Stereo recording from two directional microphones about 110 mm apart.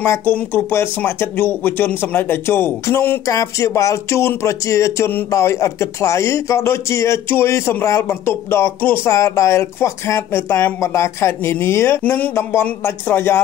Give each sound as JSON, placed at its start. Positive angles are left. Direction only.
{"t": 0.0, "sound": "speech", "side_deg": 20}